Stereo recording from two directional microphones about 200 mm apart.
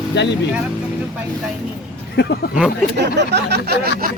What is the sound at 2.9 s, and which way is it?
Speech, 60° right (ahead or behind).